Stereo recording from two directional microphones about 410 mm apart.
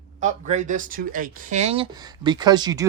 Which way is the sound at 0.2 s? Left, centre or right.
Centre.